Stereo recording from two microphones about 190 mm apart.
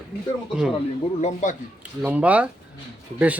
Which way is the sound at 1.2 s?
40° left (ahead or behind).